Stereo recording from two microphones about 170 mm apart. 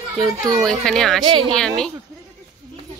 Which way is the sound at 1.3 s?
30° right (ahead or behind).